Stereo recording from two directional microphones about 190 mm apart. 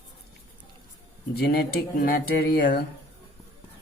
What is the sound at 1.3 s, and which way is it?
Speech, 55° left (ahead or behind).